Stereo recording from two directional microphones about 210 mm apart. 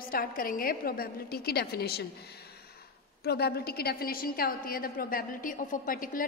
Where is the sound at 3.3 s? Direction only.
50° left (ahead or behind).